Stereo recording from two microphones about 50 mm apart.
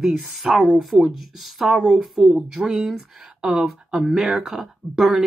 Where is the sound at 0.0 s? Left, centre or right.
Centre.